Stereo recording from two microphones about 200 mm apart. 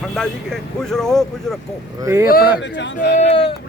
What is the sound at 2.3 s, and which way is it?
Speech, 55° left (ahead or behind).